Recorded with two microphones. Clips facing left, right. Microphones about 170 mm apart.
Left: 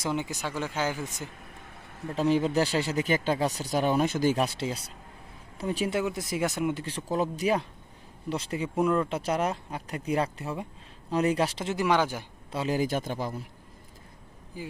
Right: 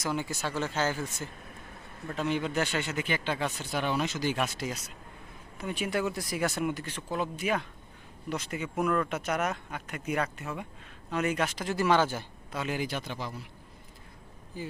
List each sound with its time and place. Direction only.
0.0 s speech: 20° left (ahead or behind)
2.1 s speech: 35° left (ahead or behind)
6.0 s speech: 20° left (ahead or behind)
12.5 s a man's voice: 30° left (ahead or behind)
14.5 s speech: 10° left (ahead or behind)